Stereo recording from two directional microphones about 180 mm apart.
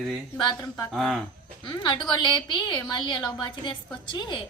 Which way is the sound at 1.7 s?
25° left (ahead or behind).